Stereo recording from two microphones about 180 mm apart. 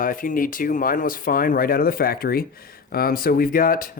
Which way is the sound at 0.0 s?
50° left (ahead or behind).